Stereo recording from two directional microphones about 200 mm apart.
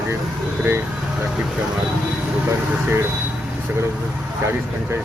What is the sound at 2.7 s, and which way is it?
Speech, 10° right (ahead or behind).